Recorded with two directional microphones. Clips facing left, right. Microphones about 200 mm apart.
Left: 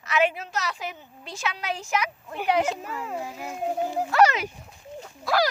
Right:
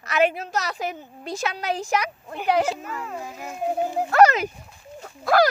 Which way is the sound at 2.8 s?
15° left (ahead or behind).